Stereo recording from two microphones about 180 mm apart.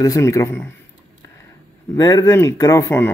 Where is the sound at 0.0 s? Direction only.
20° left (ahead or behind).